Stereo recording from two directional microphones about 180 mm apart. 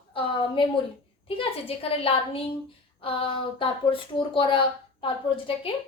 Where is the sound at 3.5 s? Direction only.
30° left (ahead or behind).